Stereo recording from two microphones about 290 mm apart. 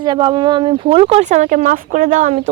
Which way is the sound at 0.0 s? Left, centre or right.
Centre.